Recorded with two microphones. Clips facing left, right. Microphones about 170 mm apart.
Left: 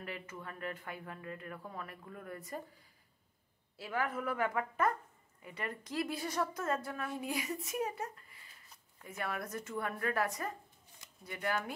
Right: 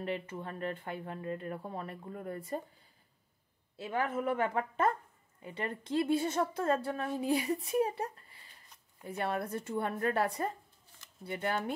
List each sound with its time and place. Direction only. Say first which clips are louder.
0.0 s a woman's voice: right 7 dB; 25° right (ahead or behind)
3.7 s a woman's voice: right 3 dB; 25° right (ahead or behind)